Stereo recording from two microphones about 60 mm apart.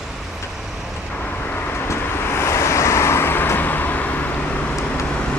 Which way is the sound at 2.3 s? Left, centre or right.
Left.